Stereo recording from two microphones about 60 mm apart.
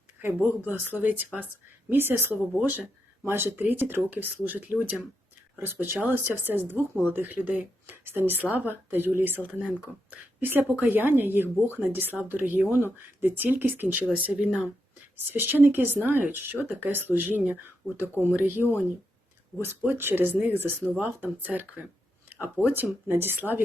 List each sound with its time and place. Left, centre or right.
0.6 s speech: right
1.9 s speech: right
5.5 s speech: right
8.0 s speech: right
15.1 s speech: right